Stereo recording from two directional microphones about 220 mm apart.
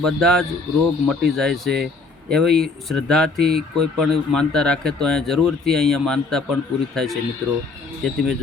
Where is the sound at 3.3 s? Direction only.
45° right (ahead or behind).